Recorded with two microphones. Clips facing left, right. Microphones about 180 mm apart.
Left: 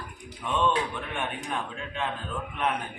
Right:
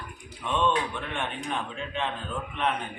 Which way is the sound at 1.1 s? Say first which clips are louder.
Even; 5° left (ahead or behind).